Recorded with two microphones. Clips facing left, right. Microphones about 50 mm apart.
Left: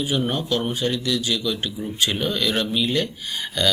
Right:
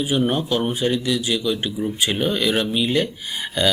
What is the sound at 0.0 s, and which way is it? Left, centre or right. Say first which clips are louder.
A man's voice: right 3 dB; centre.